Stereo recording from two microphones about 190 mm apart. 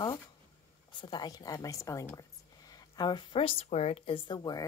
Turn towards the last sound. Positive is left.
turn(degrees=20)  # may be behind; listen again after turning